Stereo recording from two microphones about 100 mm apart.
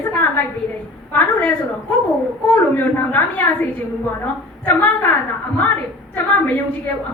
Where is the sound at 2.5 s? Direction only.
15° left (ahead or behind).